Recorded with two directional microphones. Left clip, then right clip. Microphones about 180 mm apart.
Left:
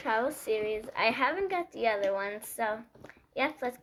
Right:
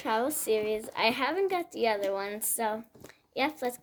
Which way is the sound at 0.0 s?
70° right (ahead or behind).